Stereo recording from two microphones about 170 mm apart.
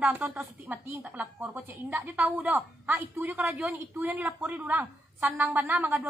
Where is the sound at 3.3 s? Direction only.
5° right (ahead or behind).